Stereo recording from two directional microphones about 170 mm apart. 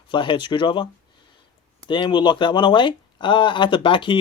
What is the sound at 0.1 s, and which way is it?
Speech, 30° left (ahead or behind).